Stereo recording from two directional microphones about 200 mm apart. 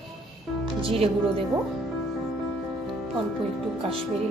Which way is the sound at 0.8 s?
30° right (ahead or behind).